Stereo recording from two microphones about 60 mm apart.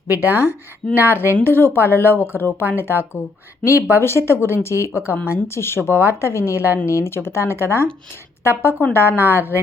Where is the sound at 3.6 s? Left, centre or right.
Right.